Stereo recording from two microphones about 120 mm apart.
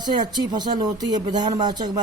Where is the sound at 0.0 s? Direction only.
35° right (ahead or behind).